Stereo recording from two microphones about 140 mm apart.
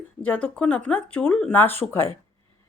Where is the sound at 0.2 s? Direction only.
10° left (ahead or behind).